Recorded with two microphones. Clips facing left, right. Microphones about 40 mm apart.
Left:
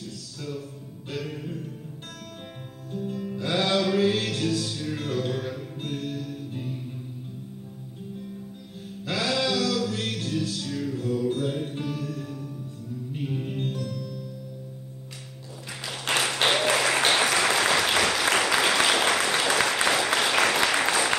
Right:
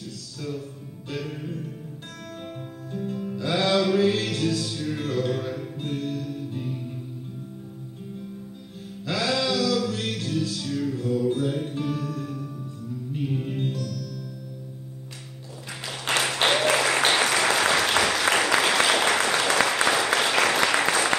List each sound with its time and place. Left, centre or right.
0.4 s music: centre
2.9 s music: centre
9.1 s music: centre
13.7 s music: centre
16.1 s applause: centre